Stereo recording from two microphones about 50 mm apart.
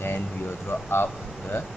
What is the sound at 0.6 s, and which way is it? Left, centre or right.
Speech, left.